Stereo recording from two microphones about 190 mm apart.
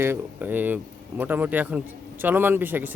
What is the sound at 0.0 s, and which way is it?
Speech, 10° right (ahead or behind).